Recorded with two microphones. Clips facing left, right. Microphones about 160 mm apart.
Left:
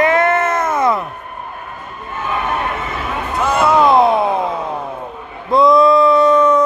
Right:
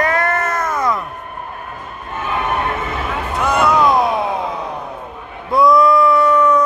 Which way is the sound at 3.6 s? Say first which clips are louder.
Left 4 dB; 25° left (ahead or behind).